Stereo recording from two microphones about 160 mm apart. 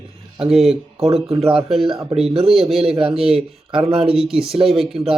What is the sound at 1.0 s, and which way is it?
Speech, 40° right (ahead or behind).